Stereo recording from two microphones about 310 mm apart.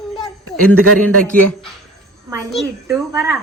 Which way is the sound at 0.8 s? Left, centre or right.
Right.